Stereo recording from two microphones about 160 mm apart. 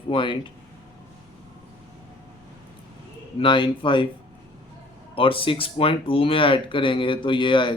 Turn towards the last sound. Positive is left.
turn(degrees=30)  # may be behind; listen again after turning